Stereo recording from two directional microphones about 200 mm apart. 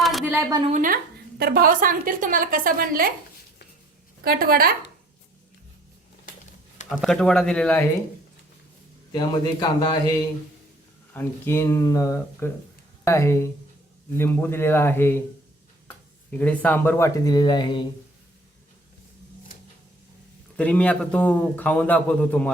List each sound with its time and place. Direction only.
0.0 s a sound: centre (ahead or behind)
0.3 s a woman's voice: 20° right (ahead or behind)
0.7 s a woman's voice: 40° right (ahead or behind)
4.2 s a woman's voice: 50° right (ahead or behind)
6.8 s speech: centre (ahead or behind)
9.1 s a man's voice: 20° left (ahead or behind)
11.1 s a man's voice: 10° left (ahead or behind)
16.3 s a man's voice: 5° left (ahead or behind); by 17.8 s 25° left (ahead or behind)
20.6 s a man's voice: 5° left (ahead or behind)